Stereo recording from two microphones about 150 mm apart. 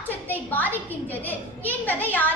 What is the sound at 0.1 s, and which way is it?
A woman's voice, 10° left (ahead or behind).